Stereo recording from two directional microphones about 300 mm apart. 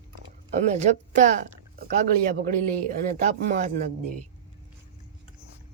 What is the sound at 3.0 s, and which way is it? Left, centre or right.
Speech, right.